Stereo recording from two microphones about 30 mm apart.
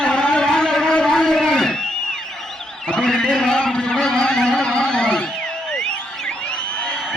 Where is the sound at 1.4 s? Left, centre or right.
Centre.